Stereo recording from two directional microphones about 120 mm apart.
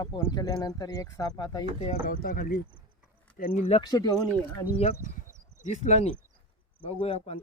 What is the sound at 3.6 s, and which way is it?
Speech, 60° left (ahead or behind).